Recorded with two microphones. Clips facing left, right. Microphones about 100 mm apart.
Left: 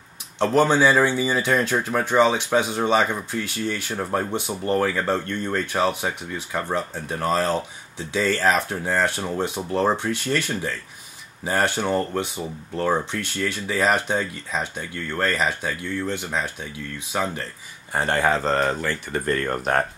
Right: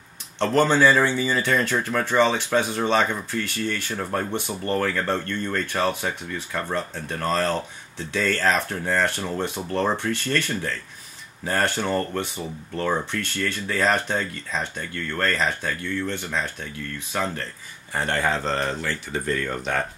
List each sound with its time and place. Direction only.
0.4 s speech: 15° left (ahead or behind)
18.4 s speech: 45° left (ahead or behind)